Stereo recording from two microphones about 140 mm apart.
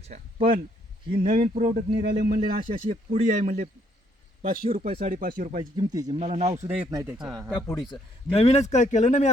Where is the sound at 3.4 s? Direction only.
75° right (ahead or behind).